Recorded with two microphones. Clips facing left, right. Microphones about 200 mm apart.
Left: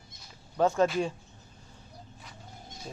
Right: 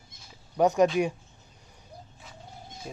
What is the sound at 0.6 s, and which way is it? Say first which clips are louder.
Speech: right 3 dB; 15° right (ahead or behind).